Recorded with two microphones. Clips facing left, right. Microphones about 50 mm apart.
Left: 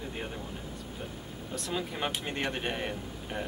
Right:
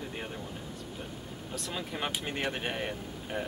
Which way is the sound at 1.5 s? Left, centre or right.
Centre.